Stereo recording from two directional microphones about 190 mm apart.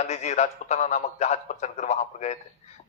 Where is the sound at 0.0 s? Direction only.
35° left (ahead or behind).